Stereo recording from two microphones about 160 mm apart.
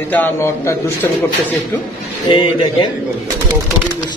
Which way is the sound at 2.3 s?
35° left (ahead or behind).